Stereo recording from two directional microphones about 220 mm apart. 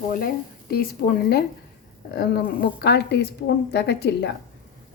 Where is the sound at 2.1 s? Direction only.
45° left (ahead or behind).